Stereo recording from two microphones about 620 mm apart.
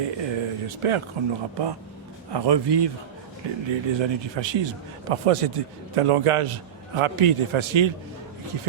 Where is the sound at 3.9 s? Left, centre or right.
Right.